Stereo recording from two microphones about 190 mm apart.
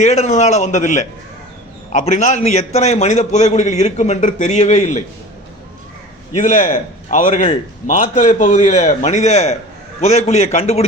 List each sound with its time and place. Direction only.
0.0 s a man's voice: 35° left (ahead or behind)
6.3 s a man's voice: 40° left (ahead or behind)